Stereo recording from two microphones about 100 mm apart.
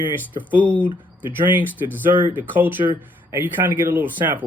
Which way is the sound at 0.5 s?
15° right (ahead or behind).